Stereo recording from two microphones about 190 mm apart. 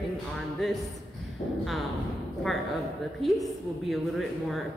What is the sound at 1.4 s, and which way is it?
Speech, 30° left (ahead or behind).